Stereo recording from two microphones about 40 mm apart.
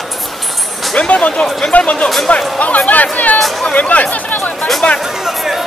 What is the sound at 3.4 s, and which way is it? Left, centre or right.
Speech, centre.